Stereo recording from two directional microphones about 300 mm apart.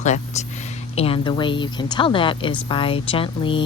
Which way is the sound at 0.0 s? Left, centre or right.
Left.